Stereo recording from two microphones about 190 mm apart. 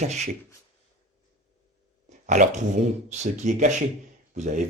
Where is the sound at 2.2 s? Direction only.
40° right (ahead or behind).